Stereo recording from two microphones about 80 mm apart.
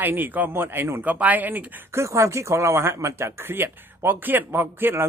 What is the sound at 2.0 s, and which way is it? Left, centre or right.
Speech, right.